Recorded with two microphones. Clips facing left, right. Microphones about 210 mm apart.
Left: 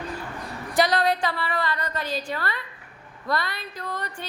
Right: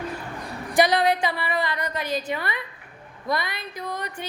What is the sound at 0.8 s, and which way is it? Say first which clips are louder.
A woman's voice: right 2 dB; 15° right (ahead or behind).